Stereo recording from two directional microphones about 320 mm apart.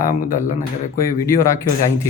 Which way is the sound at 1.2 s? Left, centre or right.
Centre.